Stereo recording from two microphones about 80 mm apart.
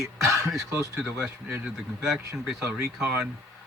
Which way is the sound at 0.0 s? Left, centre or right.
Right.